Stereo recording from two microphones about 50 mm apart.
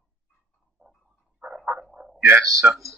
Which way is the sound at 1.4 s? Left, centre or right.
Right.